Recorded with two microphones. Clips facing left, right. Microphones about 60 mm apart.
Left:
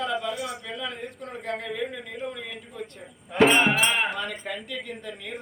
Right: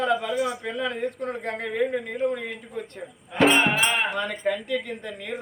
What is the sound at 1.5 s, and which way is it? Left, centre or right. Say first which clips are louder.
Speech: right 4 dB; right.